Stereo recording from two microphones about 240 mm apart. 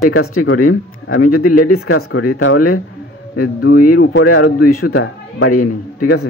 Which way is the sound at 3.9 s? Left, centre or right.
Left.